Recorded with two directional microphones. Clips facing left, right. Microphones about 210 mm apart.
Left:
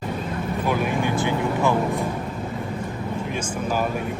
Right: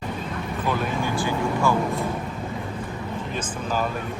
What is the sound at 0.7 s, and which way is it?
Vehicle, 10° left (ahead or behind).